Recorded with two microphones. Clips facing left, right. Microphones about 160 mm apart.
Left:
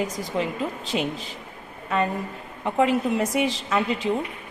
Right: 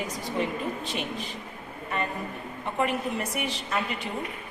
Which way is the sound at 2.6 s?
90° left.